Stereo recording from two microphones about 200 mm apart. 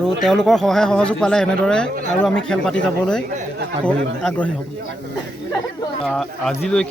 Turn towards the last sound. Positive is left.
turn(degrees=5)  # may be behind; listen again after turning